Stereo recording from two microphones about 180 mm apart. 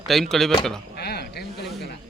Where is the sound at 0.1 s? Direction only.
Centre (ahead or behind).